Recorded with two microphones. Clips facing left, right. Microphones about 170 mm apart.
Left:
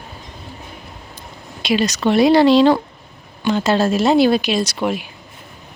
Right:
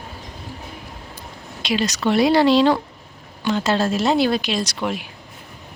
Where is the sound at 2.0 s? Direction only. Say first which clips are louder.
Left 3 dB; 20° left (ahead or behind); by 5.1 s 5° left (ahead or behind).